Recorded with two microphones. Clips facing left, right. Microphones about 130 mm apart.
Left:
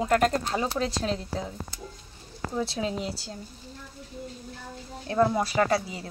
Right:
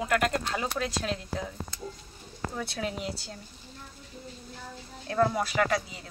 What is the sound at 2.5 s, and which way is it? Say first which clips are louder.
Speech: left 6 dB; 25° left (ahead or behind).